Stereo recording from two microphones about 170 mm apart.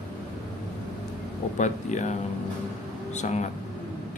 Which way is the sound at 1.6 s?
45° left (ahead or behind).